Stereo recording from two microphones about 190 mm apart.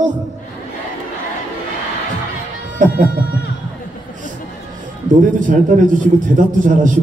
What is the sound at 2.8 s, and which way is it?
Music, 45° right (ahead or behind).